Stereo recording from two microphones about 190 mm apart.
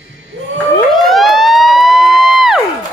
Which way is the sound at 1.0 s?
Centre (ahead or behind).